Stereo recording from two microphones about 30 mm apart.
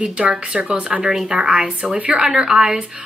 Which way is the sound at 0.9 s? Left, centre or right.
Centre.